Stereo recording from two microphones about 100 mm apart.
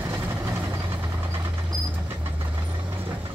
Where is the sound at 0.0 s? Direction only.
20° right (ahead or behind).